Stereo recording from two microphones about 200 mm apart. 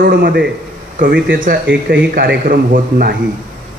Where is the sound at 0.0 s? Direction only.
50° right (ahead or behind).